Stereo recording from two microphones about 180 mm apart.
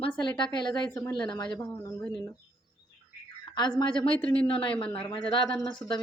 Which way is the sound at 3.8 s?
25° left (ahead or behind).